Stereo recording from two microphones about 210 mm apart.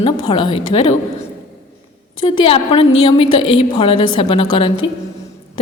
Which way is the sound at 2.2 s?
25° left (ahead or behind).